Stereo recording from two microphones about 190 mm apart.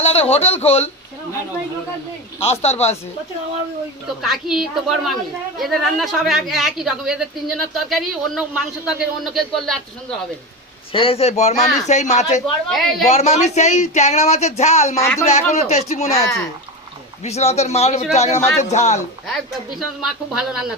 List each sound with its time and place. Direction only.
0.0 s speech: 30° left (ahead or behind)
2.4 s speech: 35° left (ahead or behind)
4.2 s a woman's voice: centre (ahead or behind)
10.9 s speech: 30° left (ahead or behind)
12.6 s a woman's voice: centre (ahead or behind)
13.1 s speech: 35° left (ahead or behind)
17.2 s speech: 35° left (ahead or behind)
20.0 s a woman's voice: 5° right (ahead or behind)